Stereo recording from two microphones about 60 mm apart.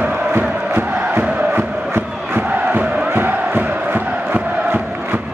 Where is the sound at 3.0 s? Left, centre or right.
Right.